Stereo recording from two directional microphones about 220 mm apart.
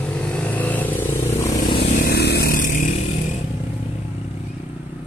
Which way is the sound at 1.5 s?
40° left (ahead or behind).